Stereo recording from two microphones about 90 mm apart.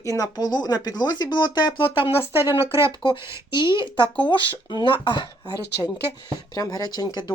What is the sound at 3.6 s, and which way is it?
Speech, 60° left (ahead or behind).